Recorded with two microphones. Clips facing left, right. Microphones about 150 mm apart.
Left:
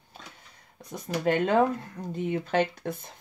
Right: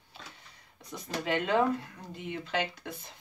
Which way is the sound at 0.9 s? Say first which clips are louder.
Left 6 dB; 50° left (ahead or behind).